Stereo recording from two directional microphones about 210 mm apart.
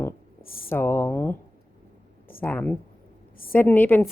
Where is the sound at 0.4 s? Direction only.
45° left (ahead or behind).